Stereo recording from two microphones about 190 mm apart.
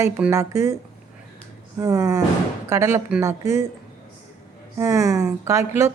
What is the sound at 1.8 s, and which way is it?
A woman's voice, 15° right (ahead or behind).